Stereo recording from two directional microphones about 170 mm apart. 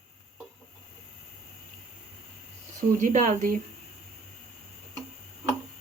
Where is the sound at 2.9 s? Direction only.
45° right (ahead or behind).